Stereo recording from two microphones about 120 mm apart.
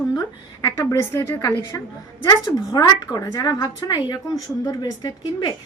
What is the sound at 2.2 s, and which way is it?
A woman's voice, 30° left (ahead or behind).